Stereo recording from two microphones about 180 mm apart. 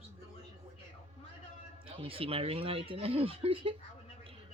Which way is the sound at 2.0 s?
30° right (ahead or behind).